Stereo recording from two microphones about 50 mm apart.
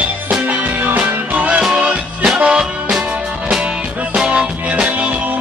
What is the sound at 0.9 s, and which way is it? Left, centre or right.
Music, right.